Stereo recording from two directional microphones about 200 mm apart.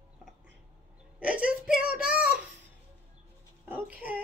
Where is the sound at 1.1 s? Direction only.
5° right (ahead or behind).